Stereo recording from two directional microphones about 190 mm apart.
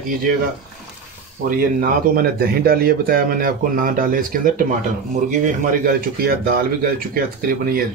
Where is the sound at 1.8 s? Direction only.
50° right (ahead or behind).